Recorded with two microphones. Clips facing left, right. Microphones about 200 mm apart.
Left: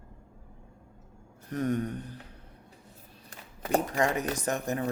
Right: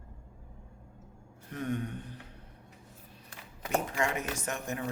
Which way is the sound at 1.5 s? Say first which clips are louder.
Left 5 dB; 40° left (ahead or behind).